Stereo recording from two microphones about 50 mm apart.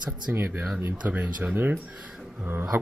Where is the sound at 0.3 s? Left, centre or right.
Right.